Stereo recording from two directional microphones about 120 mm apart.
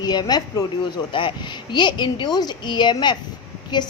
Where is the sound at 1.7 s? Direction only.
40° left (ahead or behind).